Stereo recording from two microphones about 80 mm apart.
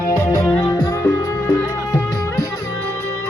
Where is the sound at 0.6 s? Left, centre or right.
Left.